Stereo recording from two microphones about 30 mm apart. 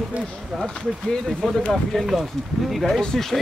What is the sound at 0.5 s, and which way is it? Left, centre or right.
Speech, centre.